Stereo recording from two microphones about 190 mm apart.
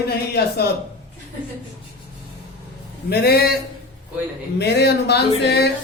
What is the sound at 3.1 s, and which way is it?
A woman's voice, 55° left (ahead or behind).